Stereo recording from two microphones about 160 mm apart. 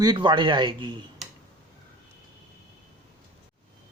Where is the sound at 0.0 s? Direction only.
30° right (ahead or behind).